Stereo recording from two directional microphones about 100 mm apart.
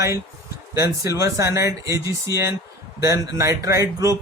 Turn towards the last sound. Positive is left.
turn(degrees=-30)  # may be behind; listen again after turning